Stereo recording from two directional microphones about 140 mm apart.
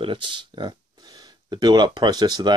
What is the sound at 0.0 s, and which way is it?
Speech, 35° right (ahead or behind).